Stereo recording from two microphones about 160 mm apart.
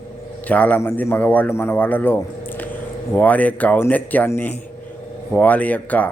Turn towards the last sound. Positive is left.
turn(degrees=10)  # may be behind; listen again after turning